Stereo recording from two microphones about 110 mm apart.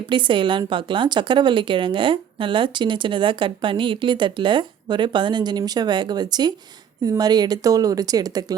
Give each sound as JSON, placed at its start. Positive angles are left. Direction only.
{"t": 0.1, "sound": "a woman's voice", "side_deg": -45}